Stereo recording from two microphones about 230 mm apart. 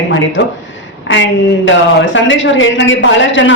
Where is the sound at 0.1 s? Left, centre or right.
Left.